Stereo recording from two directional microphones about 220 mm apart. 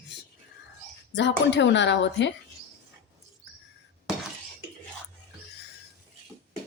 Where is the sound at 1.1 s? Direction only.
55° left (ahead or behind).